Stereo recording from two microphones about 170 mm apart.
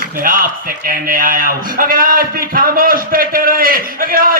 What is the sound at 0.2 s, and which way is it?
A man's voice, 55° right (ahead or behind).